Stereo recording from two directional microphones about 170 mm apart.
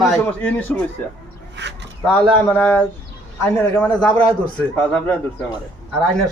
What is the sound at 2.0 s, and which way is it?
A man's voice, 5° left (ahead or behind).